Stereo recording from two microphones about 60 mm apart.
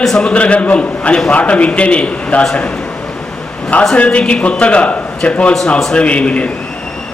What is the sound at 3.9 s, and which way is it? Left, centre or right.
A man's voice, left.